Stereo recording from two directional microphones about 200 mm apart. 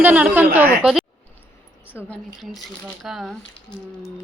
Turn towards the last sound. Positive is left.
turn(degrees=20)  # may be behind; listen again after turning